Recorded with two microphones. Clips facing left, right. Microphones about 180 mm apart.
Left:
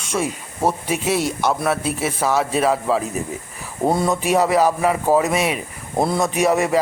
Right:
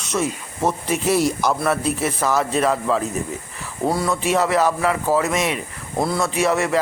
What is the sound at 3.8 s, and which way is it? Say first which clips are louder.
Speech: left 2 dB; 20° left (ahead or behind).